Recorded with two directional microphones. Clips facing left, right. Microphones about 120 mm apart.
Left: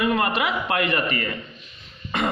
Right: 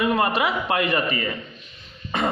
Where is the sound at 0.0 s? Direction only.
25° right (ahead or behind).